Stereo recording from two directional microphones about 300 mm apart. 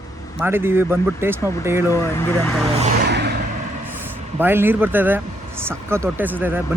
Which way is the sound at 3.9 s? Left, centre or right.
Centre.